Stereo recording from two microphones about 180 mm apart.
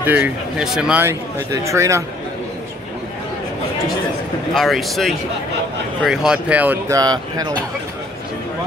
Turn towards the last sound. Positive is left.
turn(degrees=-20)  # may be behind; listen again after turning